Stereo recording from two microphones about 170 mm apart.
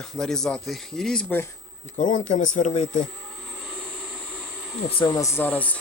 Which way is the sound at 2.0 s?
50° left (ahead or behind).